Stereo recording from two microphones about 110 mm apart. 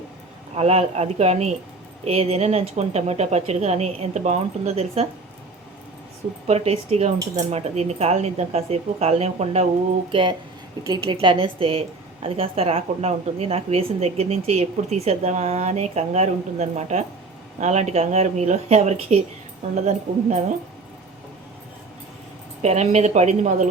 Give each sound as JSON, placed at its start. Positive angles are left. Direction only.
{"t": 0.5, "sound": "a woman's voice", "side_deg": -70}
{"t": 2.0, "sound": "a woman's voice", "side_deg": -70}
{"t": 6.5, "sound": "a woman's voice", "side_deg": -75}
{"t": 10.1, "sound": "a woman's voice", "side_deg": -50}
{"t": 22.6, "sound": "speech", "side_deg": -90}